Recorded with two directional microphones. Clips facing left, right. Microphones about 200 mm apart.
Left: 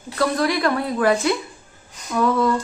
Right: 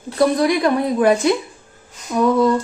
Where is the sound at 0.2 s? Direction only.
15° right (ahead or behind).